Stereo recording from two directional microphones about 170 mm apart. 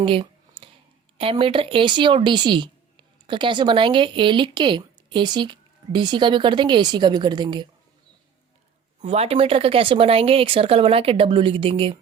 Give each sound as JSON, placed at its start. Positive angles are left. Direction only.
{"t": 0.0, "sound": "a sound", "side_deg": -30}
{"t": 1.2, "sound": "speech", "side_deg": -35}
{"t": 9.0, "sound": "speech", "side_deg": -35}